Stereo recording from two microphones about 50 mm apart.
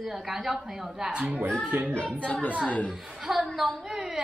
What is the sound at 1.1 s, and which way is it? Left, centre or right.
Speech, centre.